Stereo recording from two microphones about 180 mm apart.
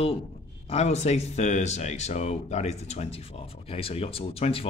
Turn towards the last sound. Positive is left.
turn(degrees=30)  # may be behind; listen again after turning